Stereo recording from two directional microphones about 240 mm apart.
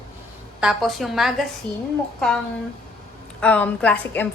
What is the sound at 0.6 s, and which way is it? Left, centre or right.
A woman's voice, centre.